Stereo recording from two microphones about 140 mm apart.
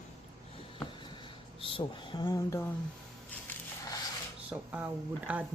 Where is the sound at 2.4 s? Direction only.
20° left (ahead or behind).